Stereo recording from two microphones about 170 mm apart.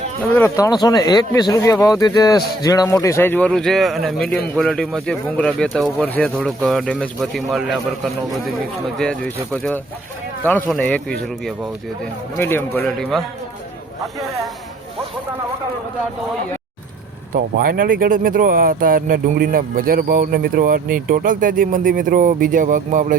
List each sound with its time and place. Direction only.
0.3 s speech: 15° left (ahead or behind); by 11.7 s centre (ahead or behind)
12.4 s speech: 15° left (ahead or behind)
17.3 s speech: 55° right (ahead or behind)